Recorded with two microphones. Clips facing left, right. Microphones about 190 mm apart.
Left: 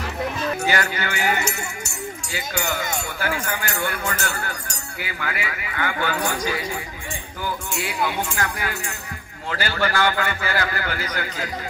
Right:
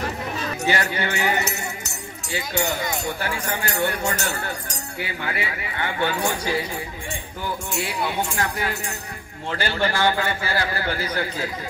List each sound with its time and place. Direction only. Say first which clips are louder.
0.7 s speech: right 5 dB; 30° right (ahead or behind)
8.4 s speech: right 1 dB; 30° right (ahead or behind)